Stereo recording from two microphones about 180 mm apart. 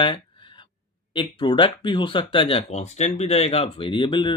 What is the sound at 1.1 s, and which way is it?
Speech, 25° left (ahead or behind).